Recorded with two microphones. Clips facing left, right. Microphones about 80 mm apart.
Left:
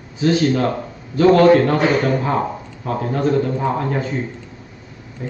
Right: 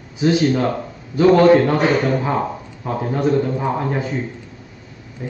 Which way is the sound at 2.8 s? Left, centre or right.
Centre.